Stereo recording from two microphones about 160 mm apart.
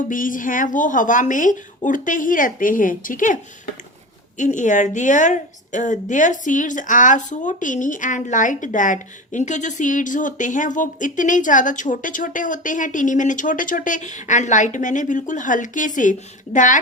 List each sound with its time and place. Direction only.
0.1 s a woman's voice: 55° left (ahead or behind)
4.4 s a woman's voice: 50° left (ahead or behind)